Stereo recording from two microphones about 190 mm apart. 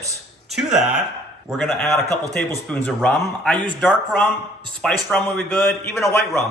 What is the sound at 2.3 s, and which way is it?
A man's voice, 5° left (ahead or behind).